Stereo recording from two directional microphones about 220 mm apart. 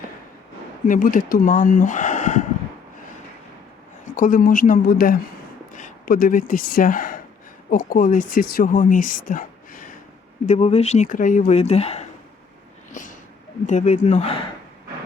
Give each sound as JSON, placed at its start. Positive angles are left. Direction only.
{"t": 0.9, "sound": "speech", "side_deg": 40}
{"t": 4.1, "sound": "speech", "side_deg": 40}
{"t": 12.9, "sound": "a sound", "side_deg": 35}
{"t": 13.7, "sound": "speech", "side_deg": 35}